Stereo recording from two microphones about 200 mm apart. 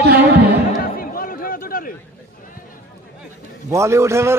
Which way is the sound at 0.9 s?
45° left (ahead or behind).